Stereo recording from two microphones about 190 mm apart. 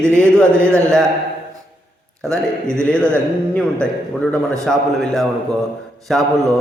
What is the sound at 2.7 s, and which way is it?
A man's voice, 5° left (ahead or behind).